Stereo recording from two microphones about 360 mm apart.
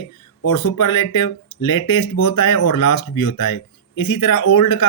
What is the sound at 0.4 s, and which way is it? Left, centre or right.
Speech, left.